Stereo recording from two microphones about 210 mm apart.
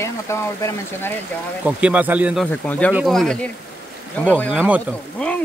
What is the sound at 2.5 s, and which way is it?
Speech, 5° left (ahead or behind).